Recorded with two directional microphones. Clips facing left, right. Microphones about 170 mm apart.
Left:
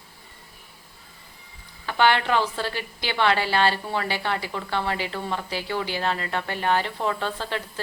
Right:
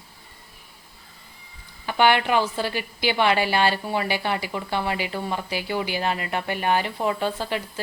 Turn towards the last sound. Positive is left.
turn(degrees=-10)  # may be behind; listen again after turning